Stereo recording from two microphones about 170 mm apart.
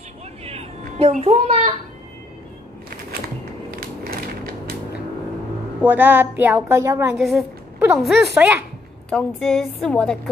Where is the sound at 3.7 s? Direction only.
60° right (ahead or behind).